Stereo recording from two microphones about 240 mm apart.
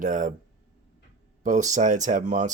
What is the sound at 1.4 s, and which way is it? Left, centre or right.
Speech, right.